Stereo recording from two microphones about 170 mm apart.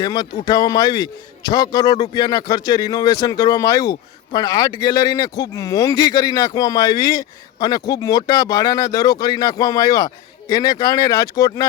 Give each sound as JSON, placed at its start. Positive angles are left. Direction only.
{"t": 0.0, "sound": "a man's voice", "side_deg": 25}